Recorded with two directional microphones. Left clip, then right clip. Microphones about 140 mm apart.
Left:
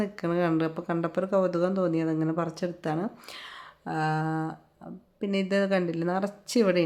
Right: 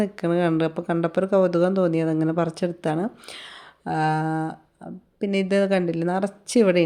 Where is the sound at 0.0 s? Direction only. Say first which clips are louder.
Right 5 dB; 35° right (ahead or behind).